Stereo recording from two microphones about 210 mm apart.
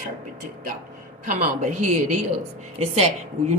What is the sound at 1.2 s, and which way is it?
A woman's voice, 40° right (ahead or behind).